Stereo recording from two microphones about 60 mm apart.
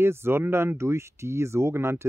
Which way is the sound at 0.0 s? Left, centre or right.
Right.